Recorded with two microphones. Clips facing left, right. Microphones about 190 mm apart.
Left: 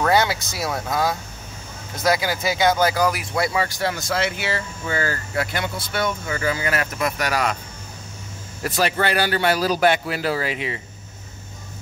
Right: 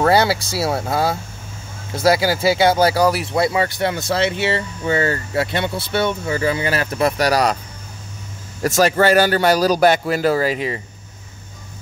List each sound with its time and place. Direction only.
0.0 s speech: 30° right (ahead or behind)
8.6 s speech: 45° right (ahead or behind)